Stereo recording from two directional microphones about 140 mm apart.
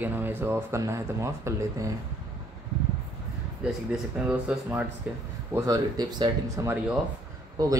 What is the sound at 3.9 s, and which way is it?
Speech, 10° right (ahead or behind).